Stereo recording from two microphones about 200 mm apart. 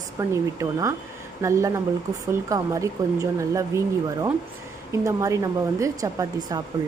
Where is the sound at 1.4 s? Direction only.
15° right (ahead or behind).